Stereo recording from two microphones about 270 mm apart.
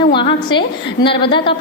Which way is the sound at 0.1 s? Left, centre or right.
Centre.